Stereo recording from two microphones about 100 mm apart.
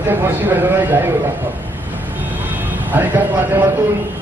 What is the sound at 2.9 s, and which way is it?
Speech, 20° right (ahead or behind).